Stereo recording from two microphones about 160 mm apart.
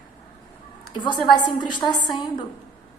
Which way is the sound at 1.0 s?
30° left (ahead or behind).